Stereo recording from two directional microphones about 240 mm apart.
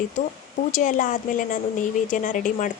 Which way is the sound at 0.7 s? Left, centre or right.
Left.